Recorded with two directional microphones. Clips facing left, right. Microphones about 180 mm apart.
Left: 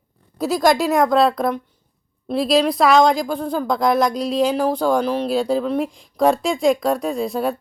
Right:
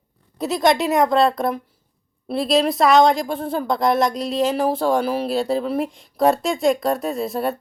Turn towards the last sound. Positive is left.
turn(degrees=0)  # may be behind; listen again after turning